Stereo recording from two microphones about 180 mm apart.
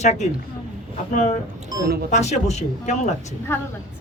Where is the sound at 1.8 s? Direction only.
60° right (ahead or behind).